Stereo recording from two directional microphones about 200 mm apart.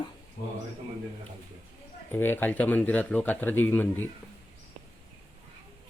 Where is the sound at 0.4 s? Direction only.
40° left (ahead or behind).